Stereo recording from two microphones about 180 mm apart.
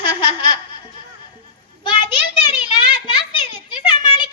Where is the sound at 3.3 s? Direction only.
25° left (ahead or behind).